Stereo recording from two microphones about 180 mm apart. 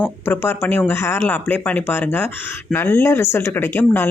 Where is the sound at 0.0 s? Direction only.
10° left (ahead or behind).